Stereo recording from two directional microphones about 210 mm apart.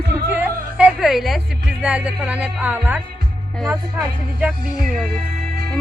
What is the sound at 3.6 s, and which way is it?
Music, 15° right (ahead or behind).